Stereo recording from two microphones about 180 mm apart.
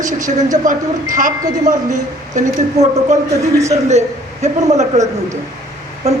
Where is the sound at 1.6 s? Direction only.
45° right (ahead or behind).